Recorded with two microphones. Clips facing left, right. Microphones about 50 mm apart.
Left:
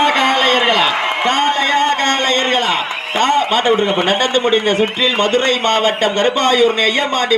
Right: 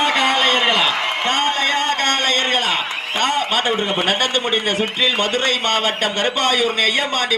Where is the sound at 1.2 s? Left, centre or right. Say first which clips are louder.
Left 4 dB; left.